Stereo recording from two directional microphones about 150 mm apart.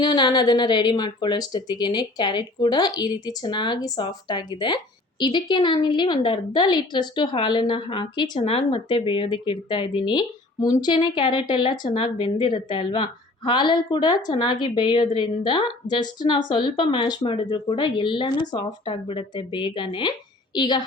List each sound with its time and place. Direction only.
0.0 s a woman's voice: 30° left (ahead or behind)